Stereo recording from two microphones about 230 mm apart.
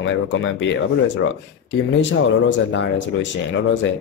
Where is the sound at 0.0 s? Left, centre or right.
Left.